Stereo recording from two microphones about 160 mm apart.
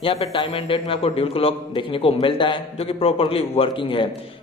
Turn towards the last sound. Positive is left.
turn(degrees=35)  # may be behind; listen again after turning